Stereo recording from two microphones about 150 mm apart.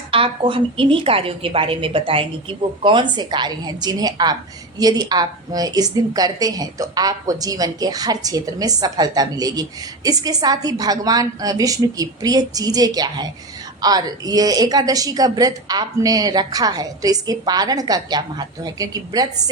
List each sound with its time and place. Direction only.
0.1 s a woman's voice: 35° right (ahead or behind)